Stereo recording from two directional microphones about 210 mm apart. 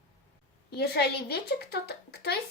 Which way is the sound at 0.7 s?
50° left (ahead or behind).